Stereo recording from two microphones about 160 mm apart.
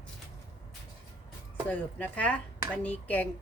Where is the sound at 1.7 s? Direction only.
10° left (ahead or behind).